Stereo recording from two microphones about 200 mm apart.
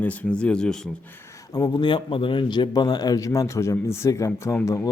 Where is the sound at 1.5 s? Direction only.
20° left (ahead or behind).